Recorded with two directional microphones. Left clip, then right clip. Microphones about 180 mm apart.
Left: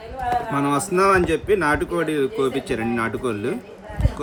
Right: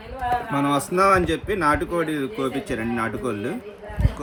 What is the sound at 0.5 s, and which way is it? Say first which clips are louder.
Speech: even; centre (ahead or behind).